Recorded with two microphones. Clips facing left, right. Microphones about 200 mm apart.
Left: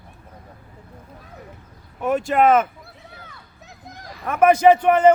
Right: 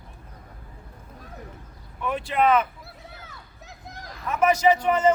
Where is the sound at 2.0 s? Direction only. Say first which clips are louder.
Left 6 dB; 45° left (ahead or behind).